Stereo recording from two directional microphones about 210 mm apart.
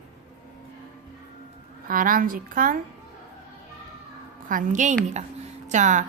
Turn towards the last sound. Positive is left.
turn(degrees=-35)  # may be behind; listen again after turning